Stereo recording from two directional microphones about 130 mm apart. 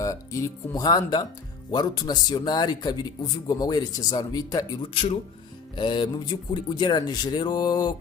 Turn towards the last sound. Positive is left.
turn(degrees=35)  # may be behind; listen again after turning